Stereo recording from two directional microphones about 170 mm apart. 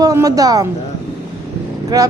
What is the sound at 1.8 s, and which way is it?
Speech, 20° right (ahead or behind).